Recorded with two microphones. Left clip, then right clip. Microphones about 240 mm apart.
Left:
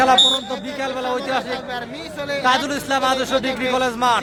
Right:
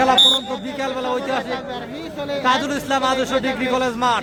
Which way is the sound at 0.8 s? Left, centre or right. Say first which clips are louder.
Right 1 dB; centre.